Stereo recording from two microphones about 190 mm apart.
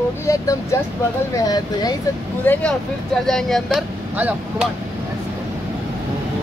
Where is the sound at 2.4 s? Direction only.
10° left (ahead or behind).